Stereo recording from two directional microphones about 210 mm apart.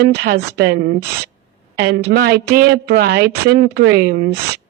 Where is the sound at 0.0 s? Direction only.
50° right (ahead or behind).